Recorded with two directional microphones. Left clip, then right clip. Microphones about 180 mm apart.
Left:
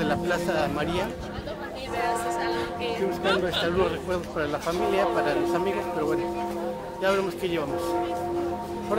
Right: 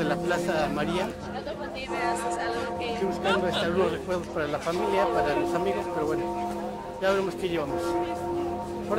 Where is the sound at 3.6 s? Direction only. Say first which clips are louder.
Left 1 dB; 5° left (ahead or behind).